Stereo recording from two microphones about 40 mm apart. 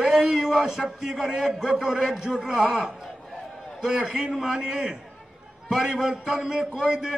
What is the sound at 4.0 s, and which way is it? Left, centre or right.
Speech, right.